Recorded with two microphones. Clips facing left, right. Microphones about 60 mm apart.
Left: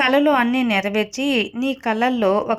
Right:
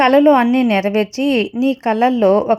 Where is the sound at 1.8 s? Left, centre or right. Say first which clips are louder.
Right 4 dB; right.